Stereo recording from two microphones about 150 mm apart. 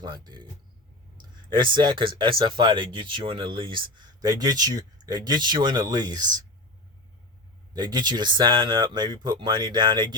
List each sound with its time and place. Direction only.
0.0 s speech: 30° right (ahead or behind)
1.5 s speech: 30° right (ahead or behind)
7.7 s speech: 25° right (ahead or behind)